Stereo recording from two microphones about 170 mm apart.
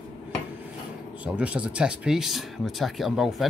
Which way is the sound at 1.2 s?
5° right (ahead or behind).